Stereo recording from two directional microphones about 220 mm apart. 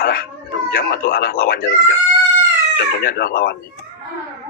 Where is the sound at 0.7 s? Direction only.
40° left (ahead or behind).